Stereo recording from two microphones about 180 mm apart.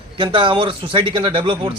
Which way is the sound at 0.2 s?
25° right (ahead or behind).